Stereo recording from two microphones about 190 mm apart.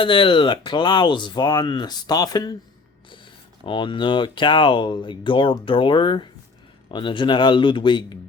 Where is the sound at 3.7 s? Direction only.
25° left (ahead or behind).